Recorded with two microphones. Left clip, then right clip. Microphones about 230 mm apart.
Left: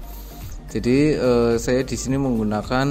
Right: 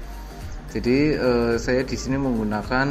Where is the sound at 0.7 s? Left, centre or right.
Left.